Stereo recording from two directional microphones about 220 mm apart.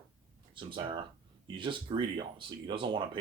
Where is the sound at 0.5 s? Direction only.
20° right (ahead or behind).